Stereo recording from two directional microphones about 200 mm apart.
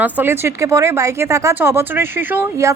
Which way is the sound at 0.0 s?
10° right (ahead or behind).